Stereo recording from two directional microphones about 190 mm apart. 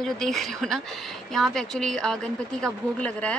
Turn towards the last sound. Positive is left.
turn(degrees=5)  # may be behind; listen again after turning